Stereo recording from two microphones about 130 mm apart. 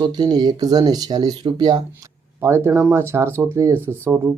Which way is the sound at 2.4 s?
20° right (ahead or behind).